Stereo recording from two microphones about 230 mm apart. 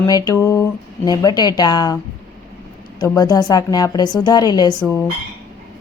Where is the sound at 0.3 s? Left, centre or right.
Centre.